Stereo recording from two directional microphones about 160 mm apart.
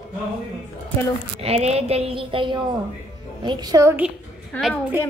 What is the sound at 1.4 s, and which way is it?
A woman's voice, 40° right (ahead or behind).